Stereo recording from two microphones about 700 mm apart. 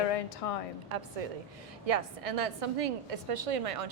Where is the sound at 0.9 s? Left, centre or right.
Right.